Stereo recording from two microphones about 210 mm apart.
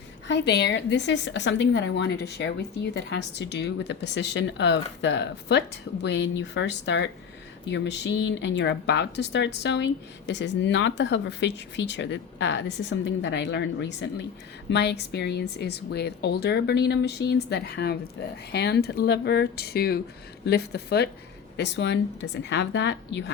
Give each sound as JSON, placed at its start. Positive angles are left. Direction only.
{"t": 0.3, "sound": "a woman's voice", "side_deg": 55}